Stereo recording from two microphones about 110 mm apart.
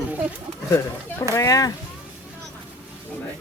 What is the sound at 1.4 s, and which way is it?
Speech, 35° left (ahead or behind).